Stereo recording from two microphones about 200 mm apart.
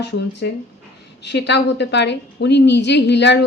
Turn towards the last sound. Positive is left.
turn(degrees=60)  # may be behind; listen again after turning